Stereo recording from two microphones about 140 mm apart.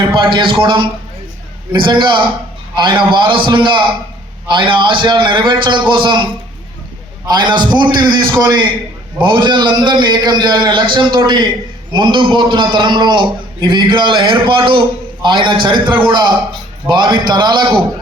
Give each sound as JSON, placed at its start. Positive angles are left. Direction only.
{"t": 0.2, "sound": "a man's voice", "side_deg": -35}
{"t": 7.3, "sound": "a man's voice", "side_deg": -30}